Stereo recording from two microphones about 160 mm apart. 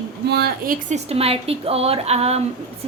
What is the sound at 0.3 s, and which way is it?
Speech, 85° right.